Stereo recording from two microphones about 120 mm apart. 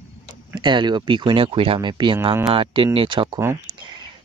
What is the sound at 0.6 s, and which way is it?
Speech, 40° right (ahead or behind).